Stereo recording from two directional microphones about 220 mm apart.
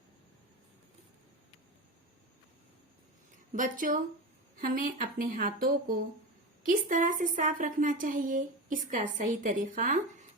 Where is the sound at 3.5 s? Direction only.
35° right (ahead or behind).